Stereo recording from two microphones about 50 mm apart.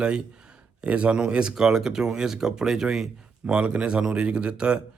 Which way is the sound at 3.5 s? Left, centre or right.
Right.